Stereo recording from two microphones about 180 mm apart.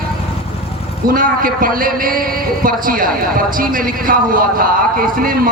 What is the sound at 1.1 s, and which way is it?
A man's voice, 50° right (ahead or behind).